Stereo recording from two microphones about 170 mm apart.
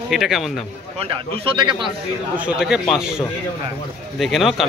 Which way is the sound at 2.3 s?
5° right (ahead or behind).